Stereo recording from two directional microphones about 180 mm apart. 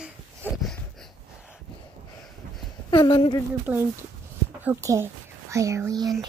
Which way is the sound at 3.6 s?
15° right (ahead or behind).